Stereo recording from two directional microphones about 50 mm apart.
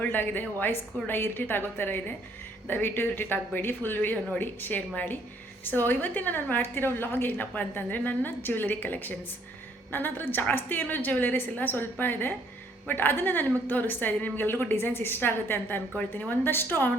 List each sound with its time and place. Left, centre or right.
0.0 s a woman's voice: left
7.3 s a woman's voice: left
14.4 s a woman's voice: left